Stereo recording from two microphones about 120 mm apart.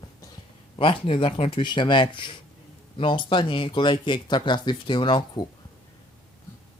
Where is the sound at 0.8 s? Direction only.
45° left (ahead or behind).